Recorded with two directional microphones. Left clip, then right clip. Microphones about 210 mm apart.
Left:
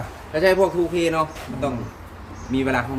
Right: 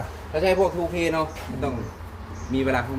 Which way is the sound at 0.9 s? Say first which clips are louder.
Left 3 dB; 50° left (ahead or behind).